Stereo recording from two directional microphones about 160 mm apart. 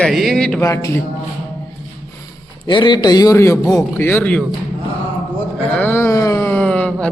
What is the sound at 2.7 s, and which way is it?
A man's voice, 30° left (ahead or behind).